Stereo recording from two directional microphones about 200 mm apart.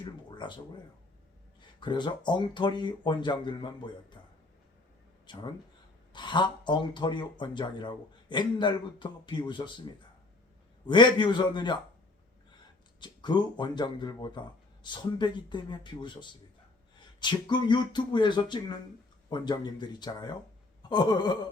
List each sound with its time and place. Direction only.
0.3 s speech: 25° left (ahead or behind)
1.8 s speech: 25° left (ahead or behind)
5.2 s speech: 20° left (ahead or behind)
10.8 s speech: 20° left (ahead or behind)
13.0 s speech: 20° left (ahead or behind)